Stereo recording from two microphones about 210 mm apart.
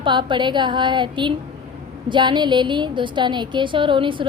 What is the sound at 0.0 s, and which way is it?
A woman's voice, 20° right (ahead or behind).